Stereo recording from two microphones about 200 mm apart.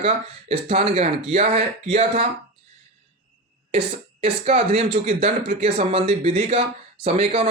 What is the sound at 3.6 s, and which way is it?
Speech, 30° right (ahead or behind).